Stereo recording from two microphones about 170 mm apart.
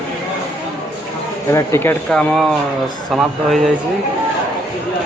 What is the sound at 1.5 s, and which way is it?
Speech, 15° left (ahead or behind).